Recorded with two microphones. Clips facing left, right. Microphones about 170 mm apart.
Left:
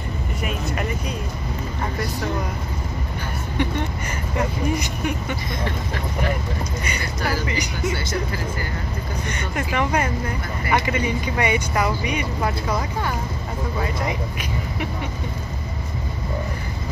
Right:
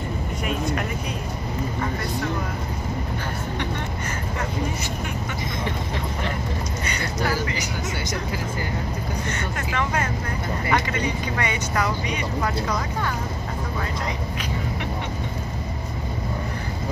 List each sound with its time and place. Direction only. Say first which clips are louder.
9.6 s speech: left 5 dB; 15° left (ahead or behind)